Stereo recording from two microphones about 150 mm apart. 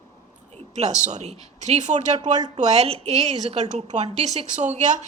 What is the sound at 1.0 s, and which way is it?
A woman's voice, 50° right (ahead or behind).